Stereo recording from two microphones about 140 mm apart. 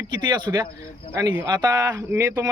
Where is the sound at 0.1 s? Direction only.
35° right (ahead or behind).